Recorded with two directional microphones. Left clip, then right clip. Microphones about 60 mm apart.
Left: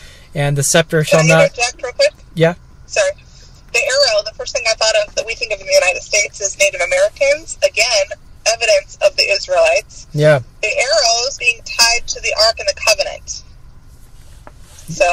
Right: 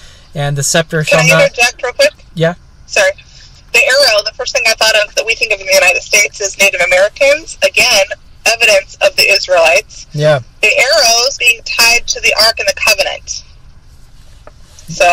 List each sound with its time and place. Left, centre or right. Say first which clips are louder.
0.0 s speech: right 1 dB; left
1.0 s a woman's voice: right 5 dB; right
2.3 s speech: even; left
2.9 s a woman's voice: right 5 dB; right
10.1 s a man's voice: right 1 dB; left
10.6 s a woman's voice: right 6 dB; right